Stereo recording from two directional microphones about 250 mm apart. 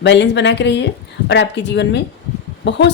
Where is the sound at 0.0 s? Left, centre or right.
Left.